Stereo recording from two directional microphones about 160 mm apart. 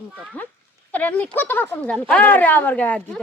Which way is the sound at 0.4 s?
10° left (ahead or behind).